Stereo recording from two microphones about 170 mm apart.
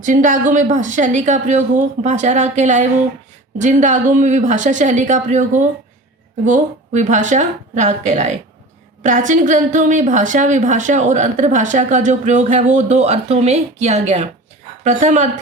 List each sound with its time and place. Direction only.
0.0 s a woman's voice: 50° right (ahead or behind)